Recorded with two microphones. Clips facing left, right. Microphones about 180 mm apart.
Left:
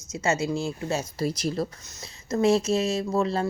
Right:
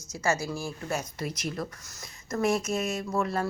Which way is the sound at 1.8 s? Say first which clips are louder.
Left 3 dB; 20° left (ahead or behind).